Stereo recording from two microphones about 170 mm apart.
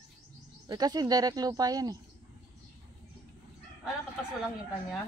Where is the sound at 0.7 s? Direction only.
25° right (ahead or behind).